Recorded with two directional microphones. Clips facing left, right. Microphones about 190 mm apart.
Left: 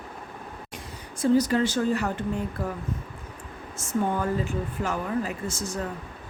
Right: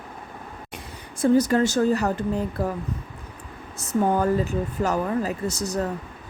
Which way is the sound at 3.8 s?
40° right (ahead or behind).